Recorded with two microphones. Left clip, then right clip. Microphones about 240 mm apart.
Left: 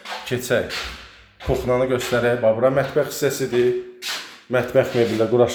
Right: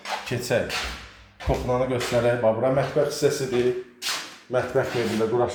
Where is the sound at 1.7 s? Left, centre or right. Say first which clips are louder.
Left 4 dB; left.